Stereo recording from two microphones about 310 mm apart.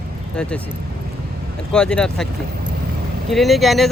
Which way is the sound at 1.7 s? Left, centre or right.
Centre.